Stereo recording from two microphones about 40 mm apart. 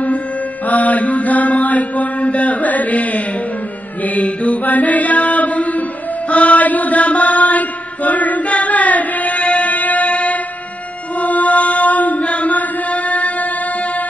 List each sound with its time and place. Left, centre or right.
0.7 s mantra: left
6.3 s chant: left